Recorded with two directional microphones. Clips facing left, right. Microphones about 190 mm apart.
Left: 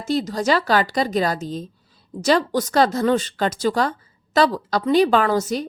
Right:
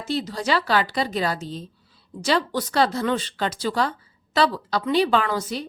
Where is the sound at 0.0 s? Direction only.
45° left (ahead or behind).